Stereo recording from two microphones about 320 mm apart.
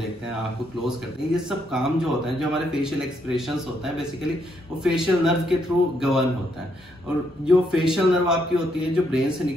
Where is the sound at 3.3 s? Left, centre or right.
Centre.